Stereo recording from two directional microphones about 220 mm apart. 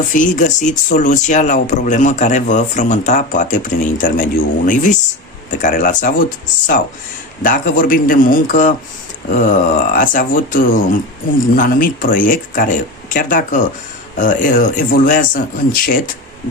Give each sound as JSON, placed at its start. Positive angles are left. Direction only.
{"t": 0.1, "sound": "speech", "side_deg": 35}
{"t": 7.4, "sound": "speech", "side_deg": 40}